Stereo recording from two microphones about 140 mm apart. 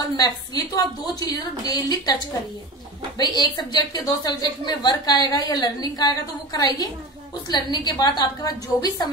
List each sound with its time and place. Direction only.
0.2 s a woman's voice: 25° left (ahead or behind)
3.2 s a woman's voice: 30° left (ahead or behind)